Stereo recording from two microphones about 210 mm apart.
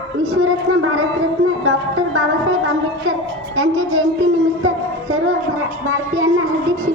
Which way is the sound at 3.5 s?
75° right (ahead or behind).